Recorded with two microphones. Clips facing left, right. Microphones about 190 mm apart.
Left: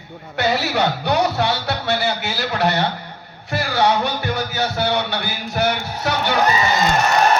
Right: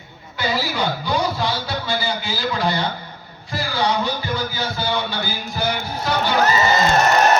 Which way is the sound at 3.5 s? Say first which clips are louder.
Left 3 dB; 65° left (ahead or behind).